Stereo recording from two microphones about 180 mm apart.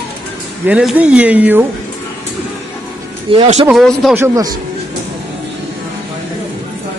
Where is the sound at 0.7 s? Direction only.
5° right (ahead or behind).